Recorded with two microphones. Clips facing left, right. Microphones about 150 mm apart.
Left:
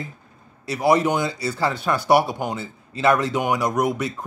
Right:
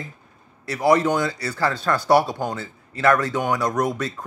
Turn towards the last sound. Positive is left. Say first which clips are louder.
# left 1 dB
turn(degrees=10)  # may be behind; listen again after turning